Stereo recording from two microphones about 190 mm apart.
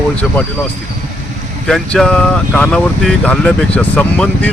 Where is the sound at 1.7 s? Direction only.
5° left (ahead or behind).